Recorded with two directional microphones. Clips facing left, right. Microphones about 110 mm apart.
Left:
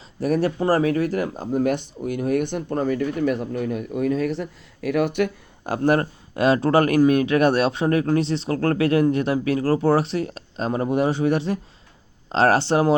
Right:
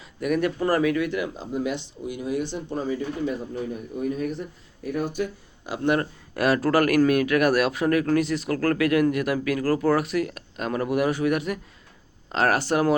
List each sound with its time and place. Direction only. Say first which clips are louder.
0.2 s speech: left 2 dB; 35° left (ahead or behind); by 5.3 s 70° left (ahead or behind)
5.6 s speech: left 4 dB; 40° left (ahead or behind)
6.3 s speech: left 3 dB; 25° left (ahead or behind)